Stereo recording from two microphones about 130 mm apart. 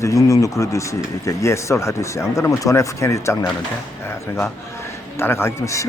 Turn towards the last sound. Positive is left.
turn(degrees=20)  # may be behind; listen again after turning